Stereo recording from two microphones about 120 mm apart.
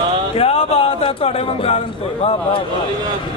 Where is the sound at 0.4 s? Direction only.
55° left (ahead or behind).